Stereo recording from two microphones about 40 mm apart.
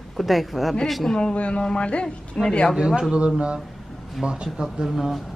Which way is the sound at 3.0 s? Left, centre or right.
Right.